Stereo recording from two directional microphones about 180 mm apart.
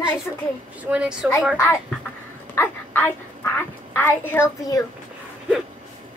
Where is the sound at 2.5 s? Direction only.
10° left (ahead or behind).